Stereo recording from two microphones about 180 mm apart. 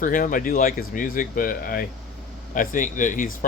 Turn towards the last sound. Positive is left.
turn(degrees=45)  # may be behind; listen again after turning